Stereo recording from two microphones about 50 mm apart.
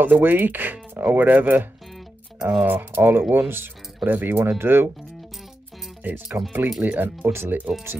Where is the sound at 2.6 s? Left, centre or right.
Right.